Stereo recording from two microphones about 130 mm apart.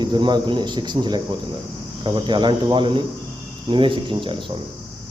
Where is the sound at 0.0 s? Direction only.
35° right (ahead or behind).